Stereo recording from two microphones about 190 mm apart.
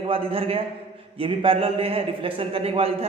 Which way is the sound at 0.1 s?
30° right (ahead or behind).